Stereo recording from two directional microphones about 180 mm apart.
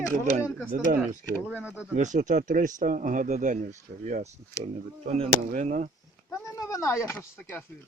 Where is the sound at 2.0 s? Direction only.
45° right (ahead or behind).